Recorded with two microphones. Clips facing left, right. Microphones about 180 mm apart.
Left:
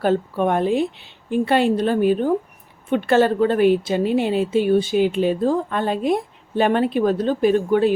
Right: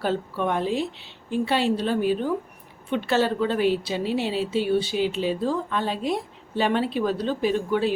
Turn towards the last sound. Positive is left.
turn(degrees=50)  # may be behind; listen again after turning